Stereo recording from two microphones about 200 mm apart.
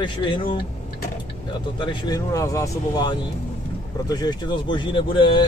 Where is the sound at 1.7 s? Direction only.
20° left (ahead or behind).